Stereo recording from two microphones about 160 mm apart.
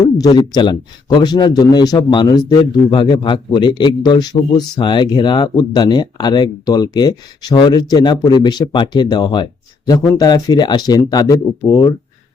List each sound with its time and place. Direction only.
0.0 s speech: 25° left (ahead or behind)